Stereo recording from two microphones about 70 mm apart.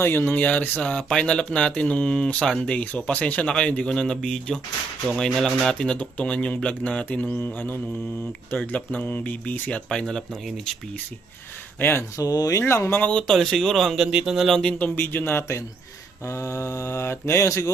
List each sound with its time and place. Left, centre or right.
0.0 s speech: left
9.9 s speech: centre
11.8 s speech: left
12.1 s speech: left
12.6 s speech: left
13.0 s speech: centre
13.3 s speech: centre
14.6 s speech: centre
16.2 s mantra: left